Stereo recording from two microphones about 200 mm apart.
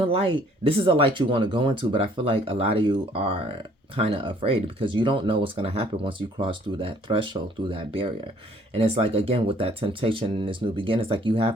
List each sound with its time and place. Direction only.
0.0 s speech: 30° right (ahead or behind)